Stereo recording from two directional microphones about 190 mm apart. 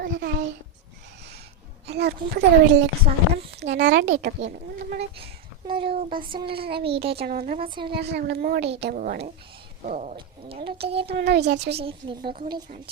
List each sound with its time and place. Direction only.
0.0 s a sound: 55° right (ahead or behind)
1.9 s speech: 60° right (ahead or behind)
5.1 s a woman's voice: 30° right (ahead or behind)
7.1 s speech: 55° right (ahead or behind)
7.6 s a woman's voice: 25° right (ahead or behind)
7.9 s a woman's voice: 60° right (ahead or behind); by 11.1 s 30° right (ahead or behind)
11.1 s speech: 60° right (ahead or behind)
11.7 s a woman's voice: 30° right (ahead or behind)
12.2 s speech: 45° right (ahead or behind)